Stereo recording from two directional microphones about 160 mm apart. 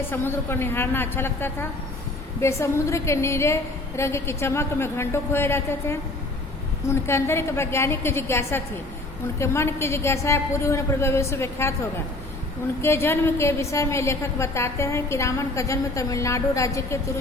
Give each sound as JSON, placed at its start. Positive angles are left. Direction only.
{"t": 0.1, "sound": "a woman's voice", "side_deg": 15}
{"t": 12.8, "sound": "a woman's voice", "side_deg": 15}